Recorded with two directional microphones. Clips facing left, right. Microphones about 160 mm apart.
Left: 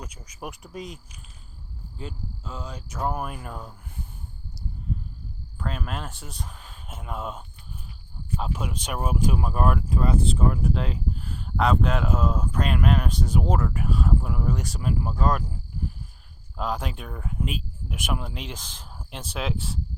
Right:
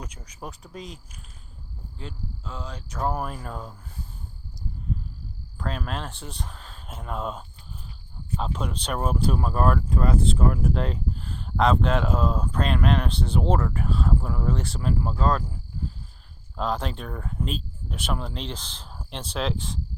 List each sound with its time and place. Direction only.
0.3 s speech: 10° left (ahead or behind)
2.0 s speech: 5° left (ahead or behind)
5.5 s speech: 5° left (ahead or behind)
8.4 s speech: 10° left (ahead or behind)
10.1 s speech: centre (ahead or behind); by 15.4 s 15° left (ahead or behind)
16.6 s speech: 10° left (ahead or behind)